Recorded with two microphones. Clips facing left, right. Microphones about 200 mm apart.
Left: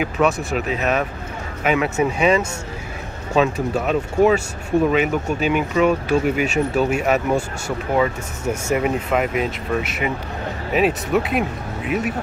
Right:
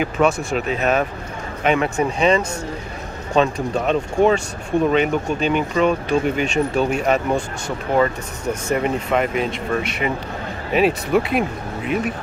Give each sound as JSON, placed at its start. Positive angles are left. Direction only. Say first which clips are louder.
{"t": 0.0, "sound": "speech", "louder": "right 1 dB", "side_deg": 0}